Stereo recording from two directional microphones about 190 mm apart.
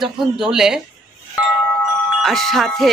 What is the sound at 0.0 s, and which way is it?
Speech, 5° right (ahead or behind).